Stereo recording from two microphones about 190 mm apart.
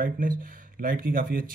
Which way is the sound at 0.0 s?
45° right (ahead or behind).